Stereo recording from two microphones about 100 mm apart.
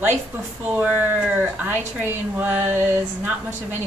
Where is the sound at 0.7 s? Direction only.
15° right (ahead or behind).